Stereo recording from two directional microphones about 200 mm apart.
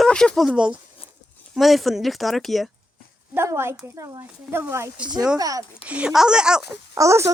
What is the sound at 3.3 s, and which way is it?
Speech, 15° right (ahead or behind).